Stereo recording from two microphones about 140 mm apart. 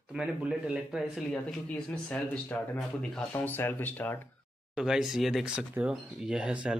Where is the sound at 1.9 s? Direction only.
5° left (ahead or behind).